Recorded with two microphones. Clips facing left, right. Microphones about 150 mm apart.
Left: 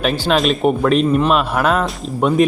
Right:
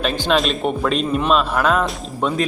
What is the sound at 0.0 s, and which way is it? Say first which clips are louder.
Speech: left 2 dB; centre (ahead or behind).